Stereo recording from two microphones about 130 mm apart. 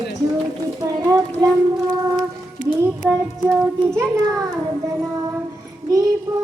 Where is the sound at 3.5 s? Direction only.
Centre (ahead or behind).